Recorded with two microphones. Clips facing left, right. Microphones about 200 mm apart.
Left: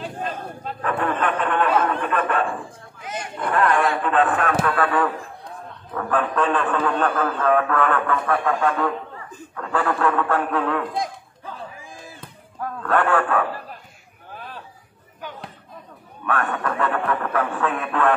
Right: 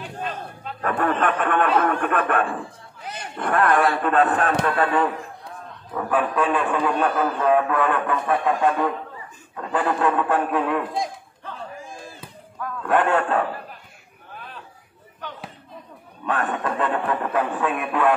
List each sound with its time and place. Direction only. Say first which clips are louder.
0.8 s a man's voice: right 1 dB; 45° right (ahead or behind)
1.4 s a sound: left 1 dB; 50° right (ahead or behind)
3.0 s a sound: left 4 dB; 35° right (ahead or behind)
3.3 s speech: right 1 dB; 50° right (ahead or behind)
4.6 s speech: even; 25° right (ahead or behind)
5.9 s speech: even; 10° right (ahead or behind)
10.9 s a sound: even; centre (ahead or behind)
12.8 s speech: even; 20° right (ahead or behind)
15.2 s basketball bounce: left 1 dB; 10° left (ahead or behind)
16.3 s speech: even; 20° right (ahead or behind)